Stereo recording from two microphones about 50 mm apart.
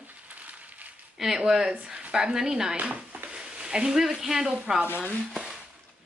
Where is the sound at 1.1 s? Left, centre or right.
Centre.